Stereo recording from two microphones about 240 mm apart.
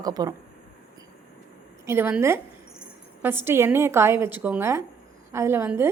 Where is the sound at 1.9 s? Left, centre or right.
Centre.